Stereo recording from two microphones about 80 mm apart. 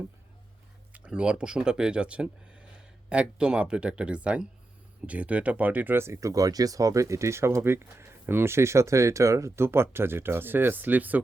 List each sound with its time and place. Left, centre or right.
0.9 s speech: centre